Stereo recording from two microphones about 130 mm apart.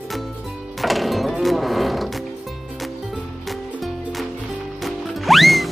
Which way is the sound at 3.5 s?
Centre (ahead or behind).